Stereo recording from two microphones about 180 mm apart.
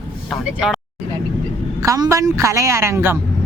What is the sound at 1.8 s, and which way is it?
Speech, 15° right (ahead or behind).